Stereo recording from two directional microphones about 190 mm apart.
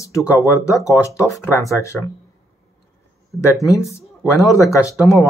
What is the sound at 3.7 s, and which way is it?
Speech, 15° left (ahead or behind).